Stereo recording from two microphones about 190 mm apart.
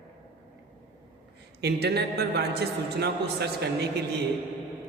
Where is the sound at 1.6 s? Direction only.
60° right (ahead or behind).